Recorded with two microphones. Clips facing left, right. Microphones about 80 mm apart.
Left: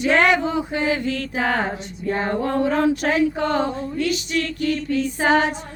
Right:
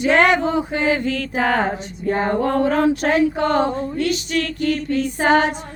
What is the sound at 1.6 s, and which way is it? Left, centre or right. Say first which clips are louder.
Speech: right 3 dB; right.